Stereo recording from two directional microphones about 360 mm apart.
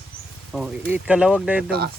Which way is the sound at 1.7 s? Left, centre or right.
Right.